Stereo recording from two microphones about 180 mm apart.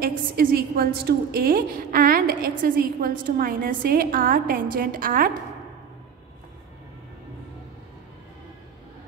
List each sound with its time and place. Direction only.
0.0 s a woman's voice: 55° right (ahead or behind)